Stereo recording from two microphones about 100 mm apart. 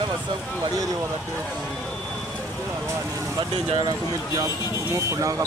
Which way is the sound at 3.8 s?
40° right (ahead or behind).